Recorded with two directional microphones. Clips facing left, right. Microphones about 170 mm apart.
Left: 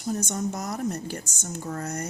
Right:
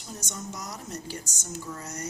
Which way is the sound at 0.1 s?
55° left (ahead or behind).